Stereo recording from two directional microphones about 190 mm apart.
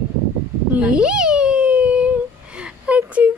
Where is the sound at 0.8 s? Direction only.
5° right (ahead or behind).